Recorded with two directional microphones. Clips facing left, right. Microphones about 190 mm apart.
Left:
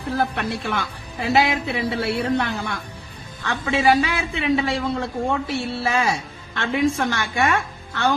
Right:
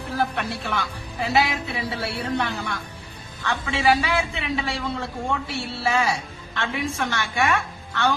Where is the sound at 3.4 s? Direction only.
45° left (ahead or behind).